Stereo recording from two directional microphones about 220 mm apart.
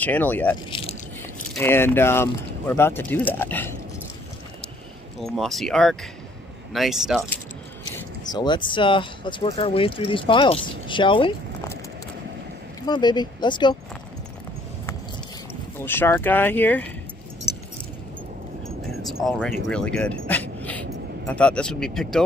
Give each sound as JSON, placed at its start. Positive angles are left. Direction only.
{"t": 0.0, "sound": "speech", "side_deg": 5}
{"t": 0.7, "sound": "a sound", "side_deg": 25}
{"t": 1.5, "sound": "speech", "side_deg": 10}
{"t": 5.2, "sound": "speech", "side_deg": 0}
{"t": 7.8, "sound": "speech", "side_deg": 15}
{"t": 12.8, "sound": "speech", "side_deg": 20}
{"t": 15.8, "sound": "speech", "side_deg": 10}
{"t": 17.5, "sound": "keys jangling", "side_deg": 45}
{"t": 19.0, "sound": "vehicle", "side_deg": 0}
{"t": 19.7, "sound": "a sound", "side_deg": 5}
{"t": 21.3, "sound": "speech", "side_deg": 5}